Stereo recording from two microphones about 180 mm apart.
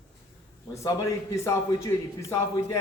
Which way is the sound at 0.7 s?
15° left (ahead or behind).